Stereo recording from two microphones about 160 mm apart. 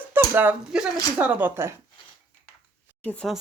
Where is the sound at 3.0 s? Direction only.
10° left (ahead or behind).